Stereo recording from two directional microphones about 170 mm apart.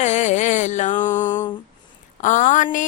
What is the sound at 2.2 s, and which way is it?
Music, 45° left (ahead or behind).